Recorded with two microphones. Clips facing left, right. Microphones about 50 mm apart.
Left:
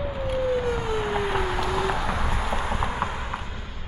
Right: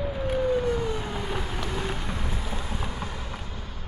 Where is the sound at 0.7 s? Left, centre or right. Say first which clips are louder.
Left 4 dB; left.